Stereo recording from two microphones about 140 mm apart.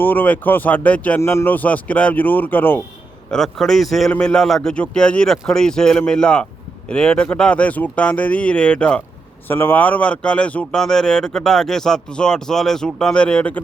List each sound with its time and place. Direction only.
0.0 s speech: 15° left (ahead or behind)
3.2 s speech: 5° left (ahead or behind)